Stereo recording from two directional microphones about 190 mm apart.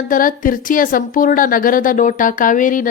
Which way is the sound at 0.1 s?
45° left (ahead or behind).